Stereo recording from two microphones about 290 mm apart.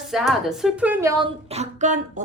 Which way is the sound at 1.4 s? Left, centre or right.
Right.